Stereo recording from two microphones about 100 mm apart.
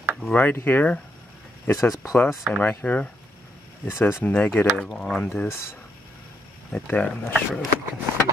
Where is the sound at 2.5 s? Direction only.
15° left (ahead or behind).